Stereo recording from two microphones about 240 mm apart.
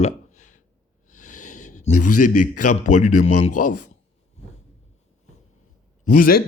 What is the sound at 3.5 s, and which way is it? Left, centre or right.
Speech, left.